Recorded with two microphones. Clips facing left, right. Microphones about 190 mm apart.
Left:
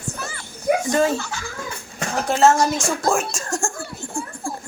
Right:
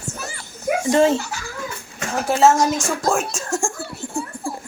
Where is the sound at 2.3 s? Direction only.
5° right (ahead or behind).